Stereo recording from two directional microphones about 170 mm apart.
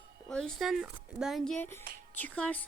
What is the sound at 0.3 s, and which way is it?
A woman's voice, 5° left (ahead or behind).